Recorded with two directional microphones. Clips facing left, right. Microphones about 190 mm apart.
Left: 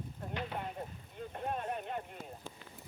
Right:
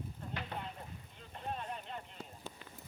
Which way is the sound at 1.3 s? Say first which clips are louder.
Left 4 dB; 50° left (ahead or behind).